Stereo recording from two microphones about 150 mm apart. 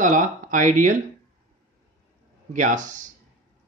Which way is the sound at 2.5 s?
55° right (ahead or behind).